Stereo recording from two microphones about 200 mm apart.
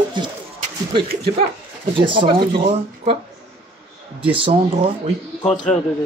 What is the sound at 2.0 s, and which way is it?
Speech, 25° right (ahead or behind).